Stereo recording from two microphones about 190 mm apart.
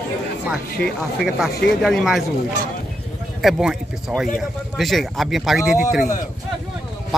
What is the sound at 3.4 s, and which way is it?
Speech, centre (ahead or behind).